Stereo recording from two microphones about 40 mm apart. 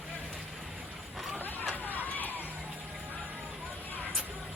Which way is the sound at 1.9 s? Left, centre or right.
Left.